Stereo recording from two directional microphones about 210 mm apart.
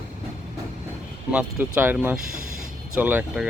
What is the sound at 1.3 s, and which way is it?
Speech, 5° right (ahead or behind).